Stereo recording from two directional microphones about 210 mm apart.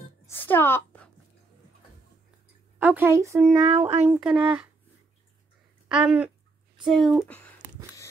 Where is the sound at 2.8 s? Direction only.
10° right (ahead or behind).